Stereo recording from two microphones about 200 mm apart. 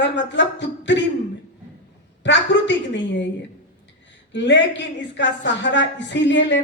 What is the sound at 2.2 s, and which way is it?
A woman's voice, 65° left (ahead or behind).